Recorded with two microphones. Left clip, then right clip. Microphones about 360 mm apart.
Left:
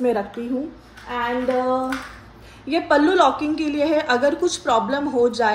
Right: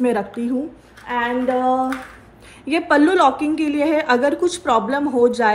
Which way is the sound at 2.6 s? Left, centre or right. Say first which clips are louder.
Right 2 dB; centre.